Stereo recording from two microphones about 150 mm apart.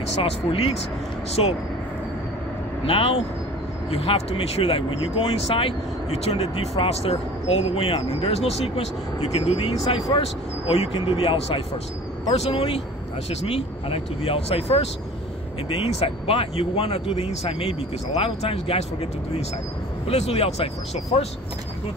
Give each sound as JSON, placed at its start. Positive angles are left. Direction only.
{"t": 0.1, "sound": "speech", "side_deg": 40}
{"t": 2.8, "sound": "speech", "side_deg": 40}